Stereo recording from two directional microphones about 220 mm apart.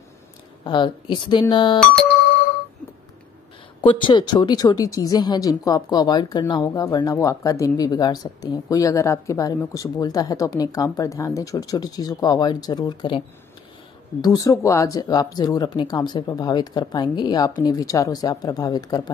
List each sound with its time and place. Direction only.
0.7 s speech: 20° left (ahead or behind)
3.8 s speech: 20° left (ahead or behind)
14.2 s speech: 15° left (ahead or behind)